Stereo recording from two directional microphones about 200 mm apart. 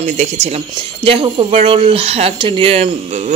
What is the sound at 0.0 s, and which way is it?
Speech, 35° right (ahead or behind).